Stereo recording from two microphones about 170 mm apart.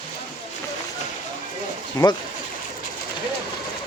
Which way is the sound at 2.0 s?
20° left (ahead or behind).